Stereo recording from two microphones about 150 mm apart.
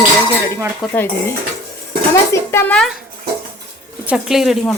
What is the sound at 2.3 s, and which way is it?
Speech, 15° left (ahead or behind).